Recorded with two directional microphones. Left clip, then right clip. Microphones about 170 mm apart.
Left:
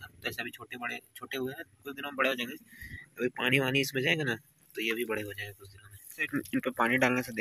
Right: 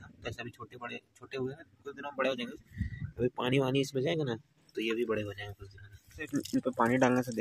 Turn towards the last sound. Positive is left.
turn(degrees=-20)  # may be behind; listen again after turning